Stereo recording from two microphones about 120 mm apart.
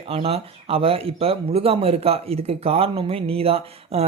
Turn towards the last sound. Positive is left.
turn(degrees=-55)  # may be behind; listen again after turning